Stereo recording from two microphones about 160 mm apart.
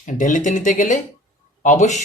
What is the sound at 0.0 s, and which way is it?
Speech, 55° left (ahead or behind).